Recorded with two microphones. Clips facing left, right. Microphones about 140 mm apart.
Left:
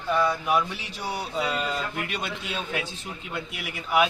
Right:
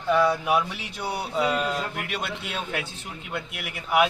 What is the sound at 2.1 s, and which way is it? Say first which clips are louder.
A man's voice: right 1 dB; 65° right (ahead or behind).